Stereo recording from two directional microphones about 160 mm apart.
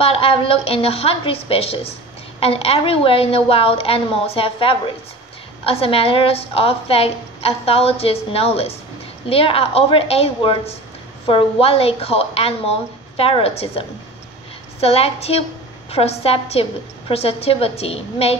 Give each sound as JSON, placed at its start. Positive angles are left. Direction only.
{"t": 0.0, "sound": "a woman's voice", "side_deg": 35}